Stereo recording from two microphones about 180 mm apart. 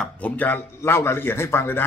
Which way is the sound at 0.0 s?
10° left (ahead or behind).